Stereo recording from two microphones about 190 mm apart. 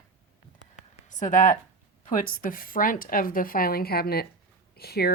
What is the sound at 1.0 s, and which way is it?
Speech, 40° left (ahead or behind).